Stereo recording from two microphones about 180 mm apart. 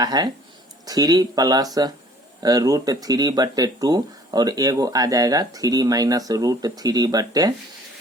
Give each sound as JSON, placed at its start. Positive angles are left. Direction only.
{"t": 0.0, "sound": "speech", "side_deg": -20}